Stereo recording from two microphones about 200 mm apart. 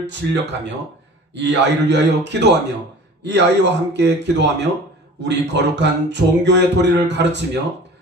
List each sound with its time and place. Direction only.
0.0 s speech: 60° right (ahead or behind)